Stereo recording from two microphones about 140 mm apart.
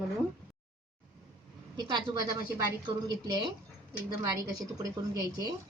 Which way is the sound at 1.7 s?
30° right (ahead or behind).